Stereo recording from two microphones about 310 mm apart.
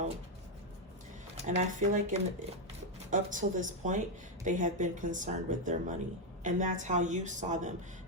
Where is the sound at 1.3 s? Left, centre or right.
Right.